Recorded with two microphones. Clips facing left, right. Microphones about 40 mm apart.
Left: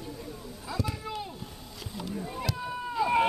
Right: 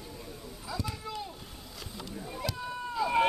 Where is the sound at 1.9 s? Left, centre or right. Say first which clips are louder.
Left 5 dB; centre.